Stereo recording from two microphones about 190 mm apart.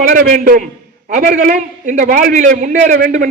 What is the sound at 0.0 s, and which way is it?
A man's voice, 45° right (ahead or behind).